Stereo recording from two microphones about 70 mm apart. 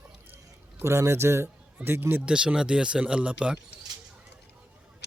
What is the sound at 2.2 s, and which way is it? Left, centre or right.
Speech, centre.